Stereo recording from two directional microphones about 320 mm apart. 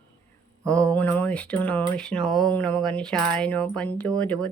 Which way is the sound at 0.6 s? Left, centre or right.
Centre.